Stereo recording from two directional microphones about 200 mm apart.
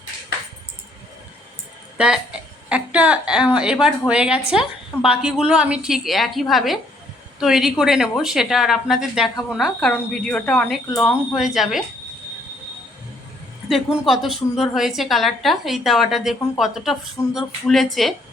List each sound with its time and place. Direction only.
2.0 s a woman's voice: 5° right (ahead or behind)
13.7 s a woman's voice: centre (ahead or behind)